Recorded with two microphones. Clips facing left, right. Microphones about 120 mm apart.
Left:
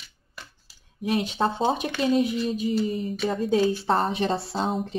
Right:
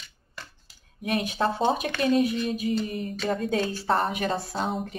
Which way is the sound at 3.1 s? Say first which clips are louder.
Left 2 dB; 5° left (ahead or behind).